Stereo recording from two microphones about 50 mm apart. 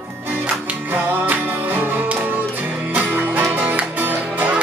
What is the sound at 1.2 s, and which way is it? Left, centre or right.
Music, right.